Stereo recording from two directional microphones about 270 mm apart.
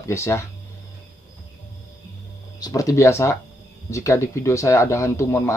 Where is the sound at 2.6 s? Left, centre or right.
Centre.